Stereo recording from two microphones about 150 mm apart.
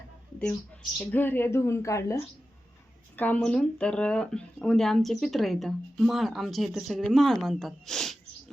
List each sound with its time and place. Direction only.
0.9 s speech: 15° left (ahead or behind)
3.2 s speech: 10° left (ahead or behind)